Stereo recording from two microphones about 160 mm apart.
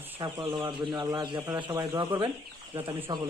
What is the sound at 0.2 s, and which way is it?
A man's voice, 25° right (ahead or behind).